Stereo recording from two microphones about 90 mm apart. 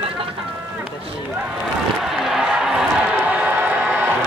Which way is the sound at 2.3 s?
5° right (ahead or behind).